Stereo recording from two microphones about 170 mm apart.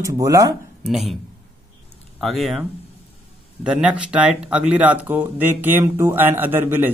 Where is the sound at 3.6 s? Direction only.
5° right (ahead or behind).